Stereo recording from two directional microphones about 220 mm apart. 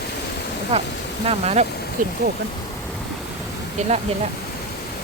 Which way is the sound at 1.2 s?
30° right (ahead or behind).